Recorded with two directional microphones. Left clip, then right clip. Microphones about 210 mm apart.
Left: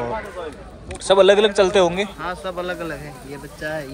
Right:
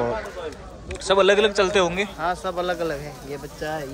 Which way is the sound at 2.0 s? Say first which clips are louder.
Right 2 dB; 55° right (ahead or behind).